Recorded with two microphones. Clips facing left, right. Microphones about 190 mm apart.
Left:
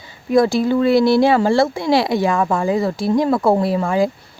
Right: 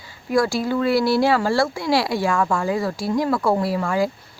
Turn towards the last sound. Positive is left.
turn(degrees=20)  # may be behind; listen again after turning